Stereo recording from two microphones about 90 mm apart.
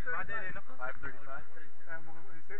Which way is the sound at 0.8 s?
20° right (ahead or behind).